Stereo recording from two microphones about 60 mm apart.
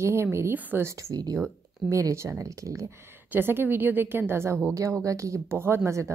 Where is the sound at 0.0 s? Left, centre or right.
Right.